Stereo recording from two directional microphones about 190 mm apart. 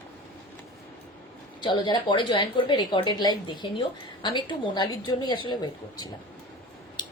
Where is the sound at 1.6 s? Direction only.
25° left (ahead or behind).